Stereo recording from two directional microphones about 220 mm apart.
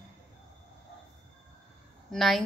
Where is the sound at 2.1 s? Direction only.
Centre (ahead or behind).